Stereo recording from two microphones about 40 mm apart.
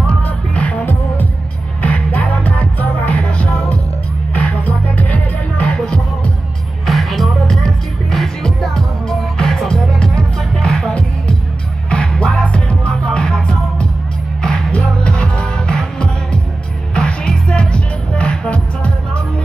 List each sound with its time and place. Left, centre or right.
0.2 s music: left
6.9 s music: centre
10.6 s music: centre
12.4 s music: left
12.9 s music: centre